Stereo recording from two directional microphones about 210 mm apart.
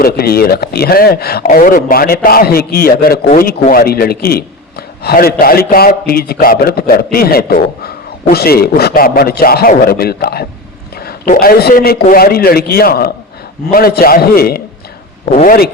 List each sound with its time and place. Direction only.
0.0 s speech: 45° left (ahead or behind)
15.3 s speech: 35° left (ahead or behind)